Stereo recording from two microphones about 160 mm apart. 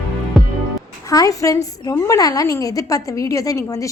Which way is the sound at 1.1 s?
20° left (ahead or behind).